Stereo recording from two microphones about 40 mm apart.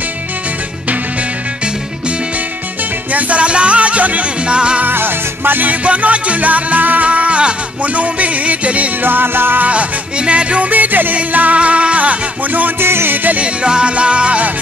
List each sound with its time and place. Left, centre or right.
3.1 s music: right
4.8 s music: right
5.7 s music: right
9.0 s music: right
9.6 s music: right
10.7 s music: right
11.1 s music: right
12.7 s music: right
13.1 s music: right
13.4 s music: right